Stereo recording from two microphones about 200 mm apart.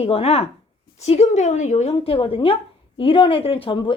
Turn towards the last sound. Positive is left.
turn(degrees=25)  # may be behind; listen again after turning